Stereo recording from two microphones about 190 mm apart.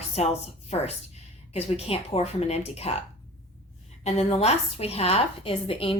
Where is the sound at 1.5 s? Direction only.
35° left (ahead or behind).